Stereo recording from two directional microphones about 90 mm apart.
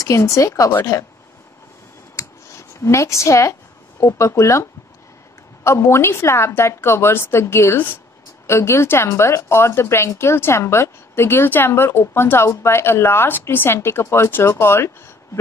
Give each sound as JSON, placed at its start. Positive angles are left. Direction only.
{"t": 0.0, "sound": "a woman's voice", "side_deg": 35}
{"t": 2.1, "sound": "a sound", "side_deg": 35}
{"t": 4.0, "sound": "a woman's voice", "side_deg": 30}